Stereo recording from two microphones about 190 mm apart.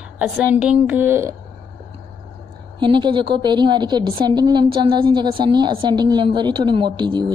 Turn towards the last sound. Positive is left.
turn(degrees=-25)  # may be behind; listen again after turning